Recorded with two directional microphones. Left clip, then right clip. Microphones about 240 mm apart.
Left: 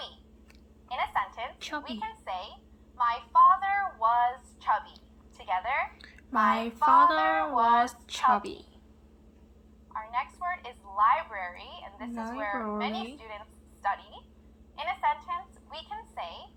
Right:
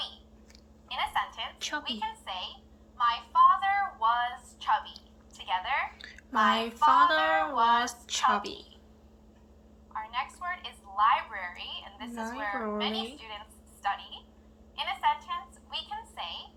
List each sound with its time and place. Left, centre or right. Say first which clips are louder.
0.9 s a sound: left 1 dB; left
3.1 s a woman's voice: left 1 dB; left
9.9 s telephone: left 1 dB; left
10.9 s a woman's voice: left 1 dB; left
14.8 s a woman's voice: even; left